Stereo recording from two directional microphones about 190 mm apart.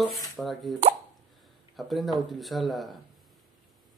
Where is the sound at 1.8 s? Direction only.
Centre (ahead or behind).